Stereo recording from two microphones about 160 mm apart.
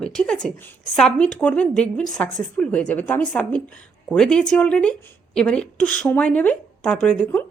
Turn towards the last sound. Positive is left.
turn(degrees=10)  # may be behind; listen again after turning